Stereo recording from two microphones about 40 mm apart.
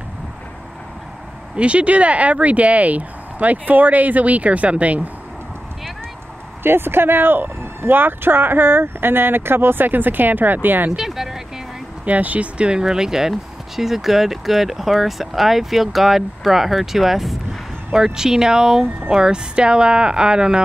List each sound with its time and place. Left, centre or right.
1.6 s speech: right
6.6 s speech: right
11.0 s a sound: centre
12.0 s speech: right
12.8 s speech: centre
17.9 s speech: centre